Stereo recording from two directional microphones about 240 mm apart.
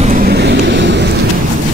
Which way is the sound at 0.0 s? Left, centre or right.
Right.